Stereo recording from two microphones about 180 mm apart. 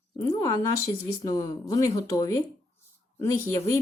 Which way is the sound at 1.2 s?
20° left (ahead or behind).